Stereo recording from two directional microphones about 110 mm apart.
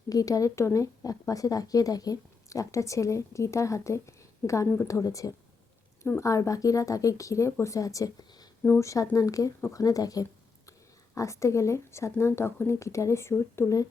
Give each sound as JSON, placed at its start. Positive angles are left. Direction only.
{"t": 0.1, "sound": "a woman's voice", "side_deg": 30}